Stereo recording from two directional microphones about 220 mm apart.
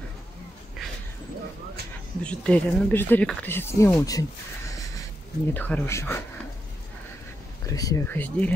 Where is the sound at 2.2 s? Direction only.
5° left (ahead or behind).